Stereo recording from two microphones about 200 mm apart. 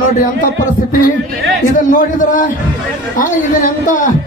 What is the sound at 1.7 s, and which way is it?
A man's voice, 40° left (ahead or behind).